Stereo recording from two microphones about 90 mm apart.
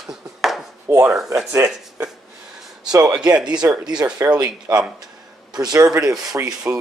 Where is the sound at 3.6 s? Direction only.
35° right (ahead or behind).